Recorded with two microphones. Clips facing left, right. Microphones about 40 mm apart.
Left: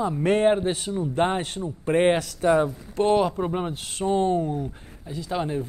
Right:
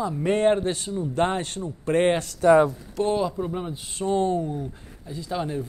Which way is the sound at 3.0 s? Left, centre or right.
Left.